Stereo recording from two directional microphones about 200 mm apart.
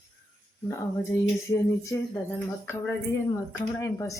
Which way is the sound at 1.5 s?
15° left (ahead or behind).